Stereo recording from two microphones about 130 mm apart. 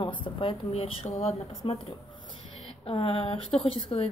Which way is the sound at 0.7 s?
50° left (ahead or behind).